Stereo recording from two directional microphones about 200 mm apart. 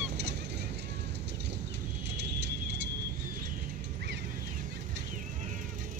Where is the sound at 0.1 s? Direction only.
55° right (ahead or behind).